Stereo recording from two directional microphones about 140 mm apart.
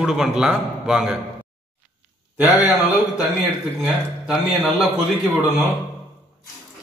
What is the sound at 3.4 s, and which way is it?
A man's voice, centre (ahead or behind).